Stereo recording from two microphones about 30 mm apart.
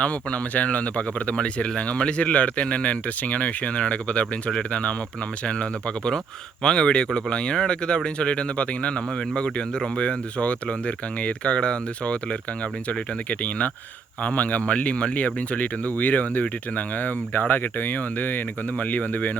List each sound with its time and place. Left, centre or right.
0.0 s speech: left
1.7 s speech: left
6.6 s a man's voice: left
12.0 s speech: left
14.3 s speech: left
14.7 s speech: left
17.5 s speech: left
18.8 s speech: left